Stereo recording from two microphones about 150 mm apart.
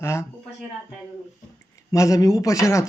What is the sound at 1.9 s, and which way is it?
Speech, 20° left (ahead or behind).